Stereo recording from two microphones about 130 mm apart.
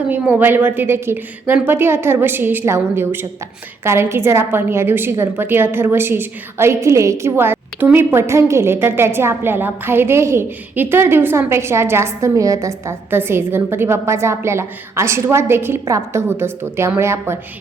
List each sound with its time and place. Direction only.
0.1 s a woman's voice: 15° right (ahead or behind)